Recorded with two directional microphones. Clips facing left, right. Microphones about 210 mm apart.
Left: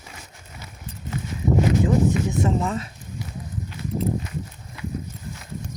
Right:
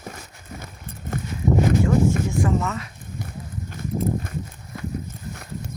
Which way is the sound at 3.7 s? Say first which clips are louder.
Right 1 dB; 50° right (ahead or behind).